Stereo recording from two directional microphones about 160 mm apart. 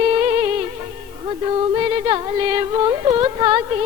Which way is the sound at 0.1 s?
25° right (ahead or behind).